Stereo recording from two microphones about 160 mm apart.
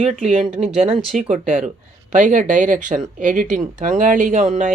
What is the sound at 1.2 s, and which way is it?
Speech, 50° right (ahead or behind).